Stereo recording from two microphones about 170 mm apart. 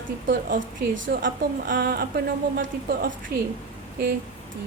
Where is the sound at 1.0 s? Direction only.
55° right (ahead or behind).